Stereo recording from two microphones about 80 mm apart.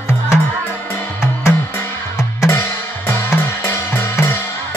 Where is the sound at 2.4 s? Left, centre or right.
Left.